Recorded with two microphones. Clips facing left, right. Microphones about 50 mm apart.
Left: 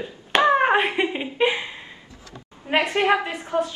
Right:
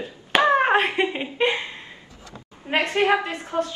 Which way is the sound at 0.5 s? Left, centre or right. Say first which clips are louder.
Even; centre.